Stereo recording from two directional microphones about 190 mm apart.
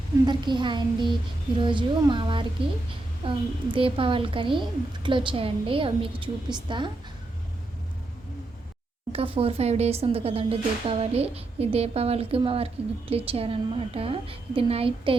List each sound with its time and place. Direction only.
0.3 s a woman's voice: 25° right (ahead or behind)
9.1 s speech: 30° right (ahead or behind)